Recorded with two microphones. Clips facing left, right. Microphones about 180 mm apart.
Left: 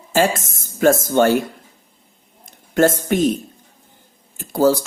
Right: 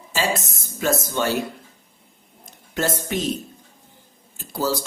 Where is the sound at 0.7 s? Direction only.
50° left (ahead or behind).